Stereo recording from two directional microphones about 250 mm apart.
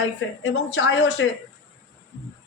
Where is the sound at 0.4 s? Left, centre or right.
Left.